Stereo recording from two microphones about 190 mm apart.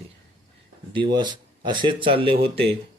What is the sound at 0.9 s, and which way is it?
A man's voice, 25° right (ahead or behind).